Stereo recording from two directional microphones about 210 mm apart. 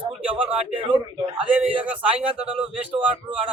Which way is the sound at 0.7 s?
25° right (ahead or behind).